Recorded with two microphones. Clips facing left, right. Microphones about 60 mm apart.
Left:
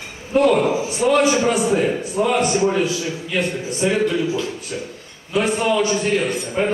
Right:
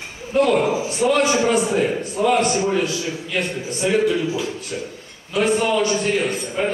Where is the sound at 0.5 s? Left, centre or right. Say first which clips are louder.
Even; centre.